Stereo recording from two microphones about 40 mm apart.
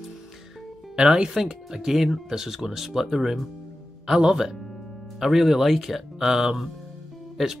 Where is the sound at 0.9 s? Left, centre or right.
Right.